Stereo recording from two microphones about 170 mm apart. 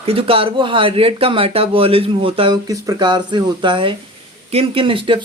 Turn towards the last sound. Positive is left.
turn(degrees=-30)  # may be behind; listen again after turning